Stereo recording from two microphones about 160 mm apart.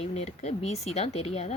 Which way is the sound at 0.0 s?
40° left (ahead or behind).